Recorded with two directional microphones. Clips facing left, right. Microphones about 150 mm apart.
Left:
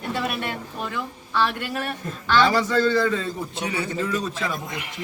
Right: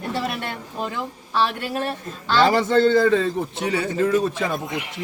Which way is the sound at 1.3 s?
30° right (ahead or behind).